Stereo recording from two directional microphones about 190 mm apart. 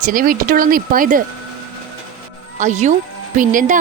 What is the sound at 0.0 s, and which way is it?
Speech, 45° right (ahead or behind).